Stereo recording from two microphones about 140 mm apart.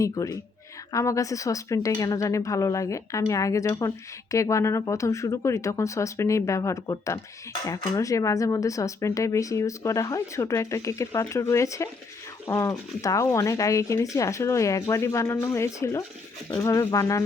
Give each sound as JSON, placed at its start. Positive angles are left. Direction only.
{"t": 0.0, "sound": "speech", "side_deg": 25}